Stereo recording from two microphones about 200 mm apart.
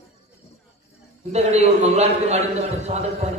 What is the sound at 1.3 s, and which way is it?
A man's voice, 35° right (ahead or behind).